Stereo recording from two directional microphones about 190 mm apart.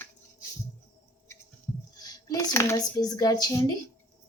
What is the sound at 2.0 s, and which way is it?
Speech, 20° left (ahead or behind).